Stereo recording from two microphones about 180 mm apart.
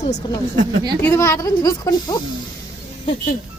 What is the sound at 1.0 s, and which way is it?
A woman's voice, 15° left (ahead or behind).